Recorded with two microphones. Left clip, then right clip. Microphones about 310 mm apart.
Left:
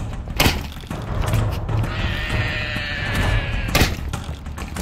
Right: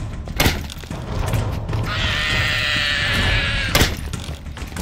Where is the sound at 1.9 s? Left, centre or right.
Centre.